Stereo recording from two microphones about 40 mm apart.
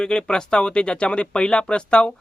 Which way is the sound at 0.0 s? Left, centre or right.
Centre.